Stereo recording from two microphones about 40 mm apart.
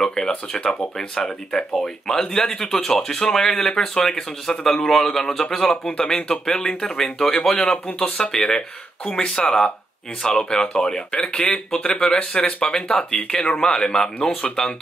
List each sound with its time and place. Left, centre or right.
0.0 s speech: centre
5.7 s speech: left